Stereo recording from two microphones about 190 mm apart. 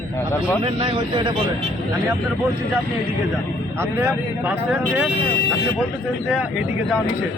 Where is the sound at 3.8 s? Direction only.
15° right (ahead or behind).